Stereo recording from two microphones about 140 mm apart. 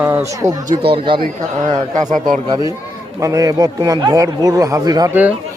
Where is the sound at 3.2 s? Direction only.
25° right (ahead or behind).